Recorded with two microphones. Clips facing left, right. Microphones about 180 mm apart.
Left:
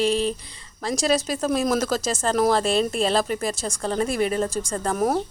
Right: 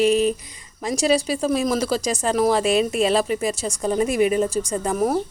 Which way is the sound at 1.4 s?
Centre (ahead or behind).